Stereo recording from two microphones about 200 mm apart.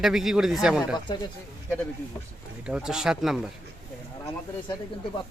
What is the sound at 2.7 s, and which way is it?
Speech, 5° right (ahead or behind).